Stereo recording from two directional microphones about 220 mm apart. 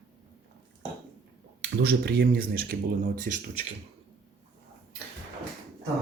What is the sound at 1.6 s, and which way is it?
Speech, 45° right (ahead or behind).